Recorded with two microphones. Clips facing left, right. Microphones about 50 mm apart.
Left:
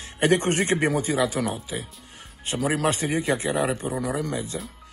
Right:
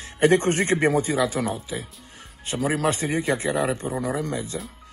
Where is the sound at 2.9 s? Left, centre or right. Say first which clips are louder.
Even; right.